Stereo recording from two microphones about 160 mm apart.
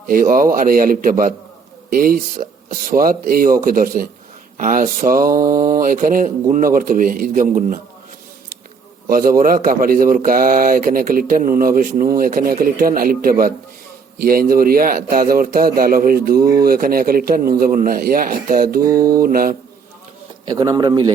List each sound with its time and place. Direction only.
0.1 s speech: 60° right (ahead or behind)
5.3 s a man's voice: 25° right (ahead or behind)
5.7 s speech: 60° right (ahead or behind)
9.0 s speech: 65° right (ahead or behind)
18.9 s a man's voice: 25° right (ahead or behind)
19.2 s speech: 65° right (ahead or behind)
20.5 s a man's voice: 20° right (ahead or behind)